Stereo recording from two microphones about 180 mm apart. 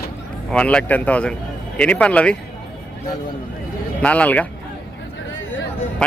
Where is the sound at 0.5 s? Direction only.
5° left (ahead or behind).